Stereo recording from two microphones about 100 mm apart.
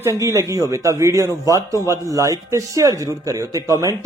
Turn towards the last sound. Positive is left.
turn(degrees=-35)  # may be behind; listen again after turning